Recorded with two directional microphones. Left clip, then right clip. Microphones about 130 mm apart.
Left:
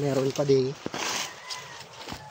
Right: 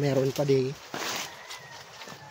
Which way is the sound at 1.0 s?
50° left (ahead or behind).